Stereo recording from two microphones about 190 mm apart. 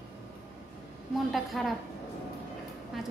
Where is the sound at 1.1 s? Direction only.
Centre (ahead or behind).